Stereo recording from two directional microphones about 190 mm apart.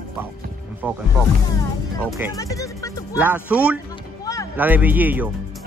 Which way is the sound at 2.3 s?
15° left (ahead or behind).